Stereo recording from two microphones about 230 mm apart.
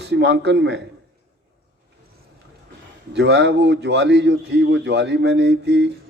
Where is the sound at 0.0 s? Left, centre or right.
Right.